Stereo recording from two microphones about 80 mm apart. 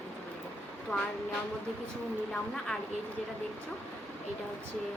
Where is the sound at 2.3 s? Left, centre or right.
Centre.